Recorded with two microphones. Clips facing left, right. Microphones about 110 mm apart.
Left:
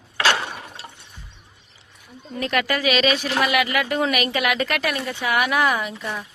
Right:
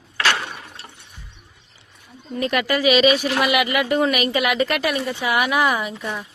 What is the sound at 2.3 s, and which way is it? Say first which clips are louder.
Speech: right 2 dB; 5° right (ahead or behind).